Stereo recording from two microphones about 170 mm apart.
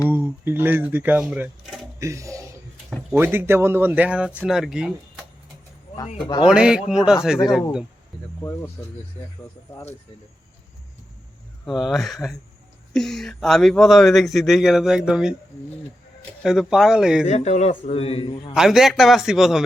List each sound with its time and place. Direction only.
0.1 s speech: 10° right (ahead or behind)
2.0 s speech: 15° right (ahead or behind)
6.4 s speech: 5° right (ahead or behind)
8.4 s speech: 10° left (ahead or behind)
11.6 s speech: centre (ahead or behind)
16.4 s speech: 5° right (ahead or behind)
17.2 s a man's voice: 40° left (ahead or behind)
18.5 s speech: centre (ahead or behind)